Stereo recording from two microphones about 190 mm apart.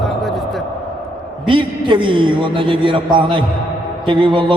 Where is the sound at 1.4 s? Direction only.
25° right (ahead or behind).